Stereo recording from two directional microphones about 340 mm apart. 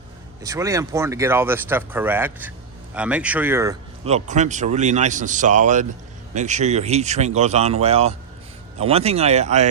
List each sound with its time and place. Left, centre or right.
0.4 s speech: centre